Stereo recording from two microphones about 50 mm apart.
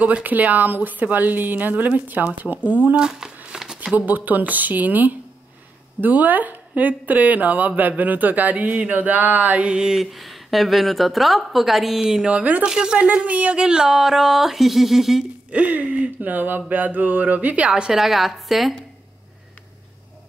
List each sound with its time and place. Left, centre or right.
0.0 s speech: right
3.0 s speech: centre
3.5 s a sound: centre
3.9 s speech: right
9.8 s speech: centre
10.1 s a woman's voice: centre
12.0 s speech: centre
13.0 s speech: right; by 15.2 s centre
15.5 s speech: right
17.6 s speech: centre
17.9 s a woman's voice: centre